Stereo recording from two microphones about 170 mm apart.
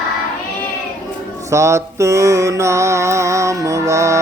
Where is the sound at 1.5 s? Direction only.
15° right (ahead or behind).